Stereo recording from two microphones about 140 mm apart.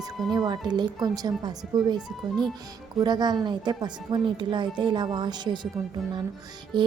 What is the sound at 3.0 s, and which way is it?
A woman's voice, 30° right (ahead or behind).